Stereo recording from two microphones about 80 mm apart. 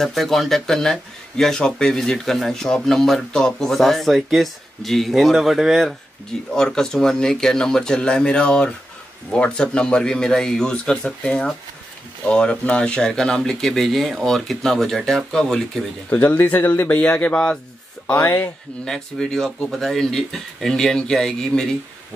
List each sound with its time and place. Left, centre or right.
0.0 s speech: centre
16.1 s speech: left
18.1 s speech: left
18.9 s speech: centre